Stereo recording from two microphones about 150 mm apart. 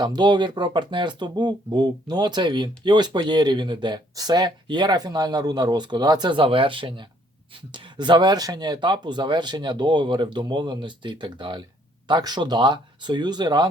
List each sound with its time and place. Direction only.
0.0 s speech: 30° right (ahead or behind)